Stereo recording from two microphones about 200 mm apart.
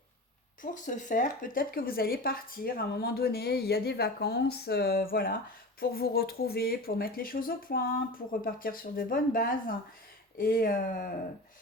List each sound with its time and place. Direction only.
0.6 s speech: 40° left (ahead or behind)